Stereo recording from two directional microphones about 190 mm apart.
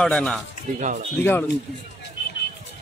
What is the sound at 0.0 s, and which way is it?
Speech, 5° left (ahead or behind).